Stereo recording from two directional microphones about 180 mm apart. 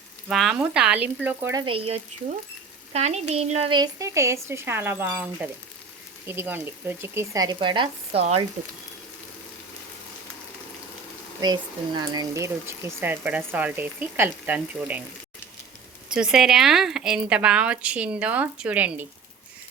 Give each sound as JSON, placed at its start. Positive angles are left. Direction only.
{"t": 0.3, "sound": "speech", "side_deg": 0}
{"t": 1.5, "sound": "speech", "side_deg": -30}
{"t": 3.8, "sound": "speech", "side_deg": -20}
{"t": 11.3, "sound": "speech", "side_deg": -25}
{"t": 16.1, "sound": "a woman's voice", "side_deg": -5}